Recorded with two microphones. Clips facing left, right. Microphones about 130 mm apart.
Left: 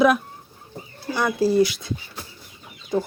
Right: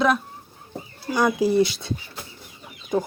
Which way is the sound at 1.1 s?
15° right (ahead or behind).